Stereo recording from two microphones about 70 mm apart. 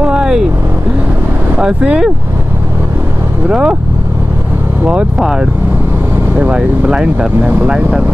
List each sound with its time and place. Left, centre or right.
0.0 s vehicle: centre
1.6 s speech: centre
3.4 s speech: centre
5.2 s speech: centre
6.3 s speech: right
6.9 s speech: centre